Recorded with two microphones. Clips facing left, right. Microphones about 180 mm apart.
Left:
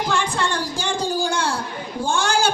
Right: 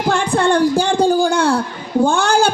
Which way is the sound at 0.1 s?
60° right (ahead or behind).